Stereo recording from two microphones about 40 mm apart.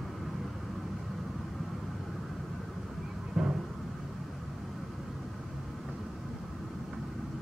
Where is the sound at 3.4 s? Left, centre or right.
Centre.